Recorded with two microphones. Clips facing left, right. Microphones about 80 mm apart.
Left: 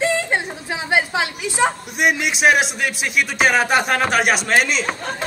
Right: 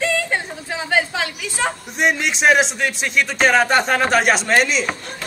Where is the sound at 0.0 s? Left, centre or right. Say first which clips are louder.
Left 1 dB; left.